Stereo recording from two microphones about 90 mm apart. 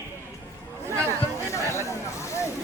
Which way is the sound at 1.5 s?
35° left (ahead or behind).